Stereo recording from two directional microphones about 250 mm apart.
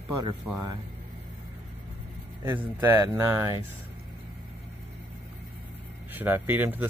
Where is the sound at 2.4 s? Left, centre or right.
Centre.